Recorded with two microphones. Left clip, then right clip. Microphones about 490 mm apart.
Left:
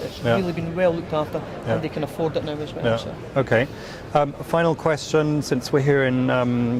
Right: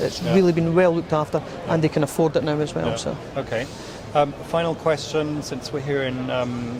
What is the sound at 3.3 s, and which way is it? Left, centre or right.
Speech, left.